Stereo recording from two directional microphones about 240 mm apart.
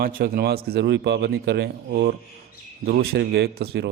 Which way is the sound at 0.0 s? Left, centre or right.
Right.